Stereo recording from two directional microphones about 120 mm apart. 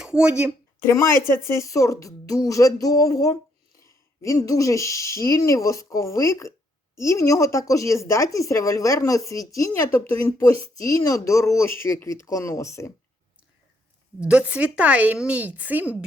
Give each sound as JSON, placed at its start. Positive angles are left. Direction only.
{"t": 0.0, "sound": "speech", "side_deg": -5}
{"t": 0.9, "sound": "speech", "side_deg": 25}
{"t": 14.2, "sound": "a woman's voice", "side_deg": -10}